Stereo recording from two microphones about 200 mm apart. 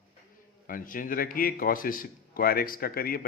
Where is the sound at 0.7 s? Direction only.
45° left (ahead or behind).